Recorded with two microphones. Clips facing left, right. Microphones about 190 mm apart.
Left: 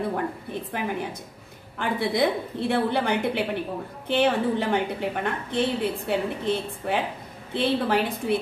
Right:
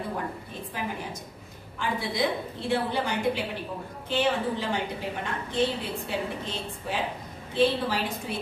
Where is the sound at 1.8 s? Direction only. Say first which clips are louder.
Left 4 dB; 60° left (ahead or behind).